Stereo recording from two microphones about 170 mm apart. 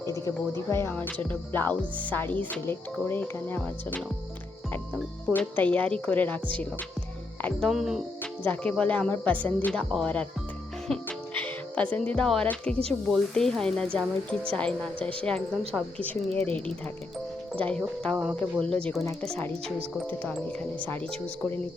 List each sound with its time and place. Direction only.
0.0 s speech: 20° left (ahead or behind)
5.3 s speech: 10° left (ahead or behind)
17.5 s speech: 5° left (ahead or behind)